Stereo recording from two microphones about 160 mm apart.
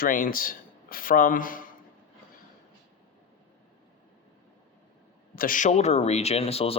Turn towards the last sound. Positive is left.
turn(degrees=40)  # may be behind; listen again after turning